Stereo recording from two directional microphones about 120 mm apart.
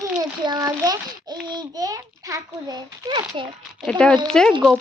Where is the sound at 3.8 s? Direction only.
5° left (ahead or behind).